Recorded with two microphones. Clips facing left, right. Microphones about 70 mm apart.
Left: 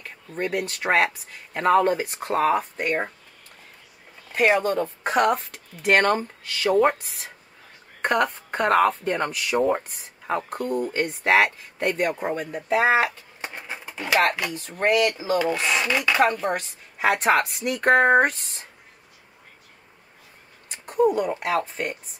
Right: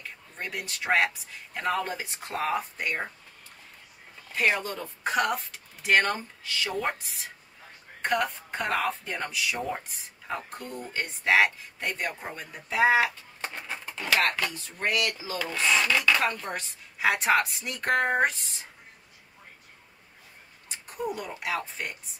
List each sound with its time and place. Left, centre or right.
0.0 s speech: left
4.3 s a sound: left
4.6 s speech: left
8.0 s speech: left
13.4 s bird: centre
13.9 s speech: centre
14.5 s speech: left
15.5 s speech: centre
16.4 s speech: left
20.6 s speech: left